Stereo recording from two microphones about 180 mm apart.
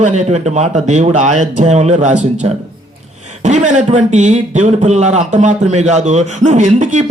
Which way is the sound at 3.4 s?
40° right (ahead or behind).